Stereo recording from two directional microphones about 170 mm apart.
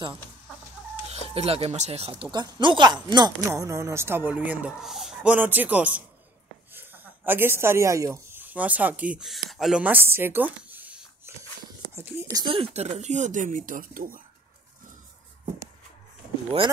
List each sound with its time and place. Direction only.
1.3 s speech: 35° right (ahead or behind)
12.7 s speech: 40° right (ahead or behind)